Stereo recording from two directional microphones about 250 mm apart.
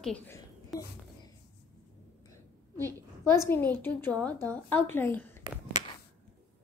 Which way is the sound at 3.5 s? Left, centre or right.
Centre.